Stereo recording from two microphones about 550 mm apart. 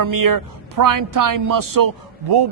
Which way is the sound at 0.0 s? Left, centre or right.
Right.